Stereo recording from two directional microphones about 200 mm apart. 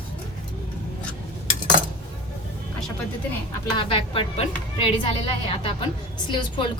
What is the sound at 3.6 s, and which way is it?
A woman's voice, 25° left (ahead or behind).